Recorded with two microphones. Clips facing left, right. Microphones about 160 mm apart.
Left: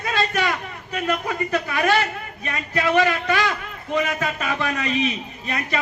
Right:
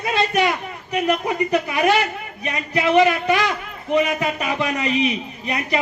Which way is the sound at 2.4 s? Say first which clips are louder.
Right 2 dB; 20° right (ahead or behind).